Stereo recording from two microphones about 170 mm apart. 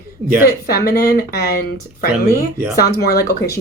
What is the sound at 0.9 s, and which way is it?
Speech, 65° left (ahead or behind).